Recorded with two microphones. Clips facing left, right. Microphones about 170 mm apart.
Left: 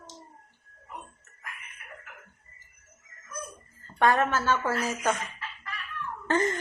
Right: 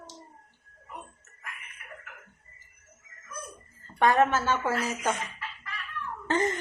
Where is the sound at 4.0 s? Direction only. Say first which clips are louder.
Right 1 dB; 20° right (ahead or behind).